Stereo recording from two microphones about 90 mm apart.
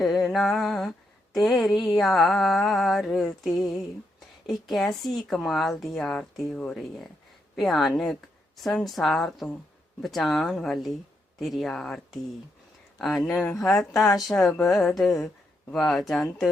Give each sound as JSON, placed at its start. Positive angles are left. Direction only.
{"t": 0.2, "sound": "a sound", "side_deg": 0}
{"t": 2.0, "sound": "a woman's voice", "side_deg": 0}
{"t": 13.2, "sound": "speech", "side_deg": 20}
{"t": 14.2, "sound": "a woman's voice", "side_deg": 0}